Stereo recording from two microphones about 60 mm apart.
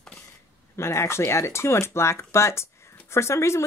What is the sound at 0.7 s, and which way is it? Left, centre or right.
Speech, left.